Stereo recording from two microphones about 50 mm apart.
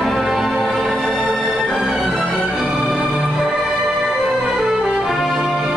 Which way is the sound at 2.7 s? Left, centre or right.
Right.